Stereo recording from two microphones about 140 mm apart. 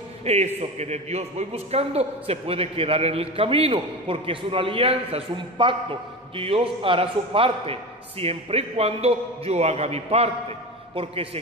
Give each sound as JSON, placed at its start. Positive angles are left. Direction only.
{"t": 0.2, "sound": "a man's voice", "side_deg": -50}